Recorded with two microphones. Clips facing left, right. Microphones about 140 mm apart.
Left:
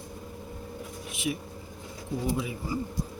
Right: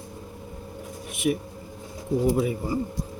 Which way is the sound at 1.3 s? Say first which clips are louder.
Right 7 dB; 50° right (ahead or behind).